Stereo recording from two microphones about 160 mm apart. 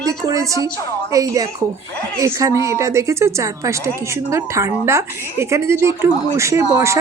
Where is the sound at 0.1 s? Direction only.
20° right (ahead or behind).